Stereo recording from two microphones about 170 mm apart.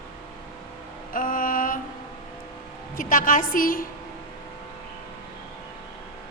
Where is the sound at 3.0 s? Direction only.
55° left (ahead or behind).